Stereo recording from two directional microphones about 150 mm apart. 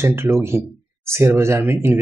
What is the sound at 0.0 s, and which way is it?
Speech, 15° right (ahead or behind).